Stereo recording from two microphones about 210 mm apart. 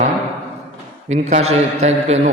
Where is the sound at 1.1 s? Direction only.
35° right (ahead or behind).